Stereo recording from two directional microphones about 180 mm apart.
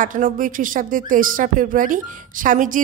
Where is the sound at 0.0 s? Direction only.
50° right (ahead or behind).